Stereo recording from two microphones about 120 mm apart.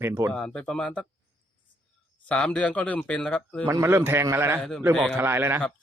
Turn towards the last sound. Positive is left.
turn(degrees=-20)  # may be behind; listen again after turning